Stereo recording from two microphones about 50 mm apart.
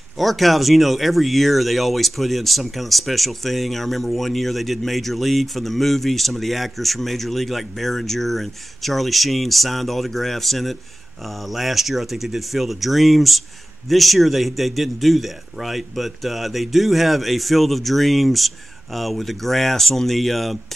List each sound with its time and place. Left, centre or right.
0.2 s speech: centre